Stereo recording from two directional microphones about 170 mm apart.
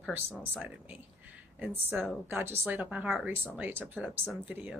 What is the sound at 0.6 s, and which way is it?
A woman's voice, 10° right (ahead or behind).